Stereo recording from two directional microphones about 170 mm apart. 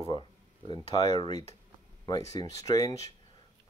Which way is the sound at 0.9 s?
25° left (ahead or behind).